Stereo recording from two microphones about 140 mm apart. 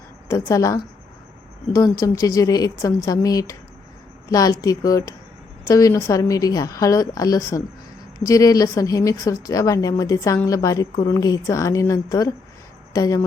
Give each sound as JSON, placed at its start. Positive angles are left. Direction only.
{"t": 0.3, "sound": "speech", "side_deg": 20}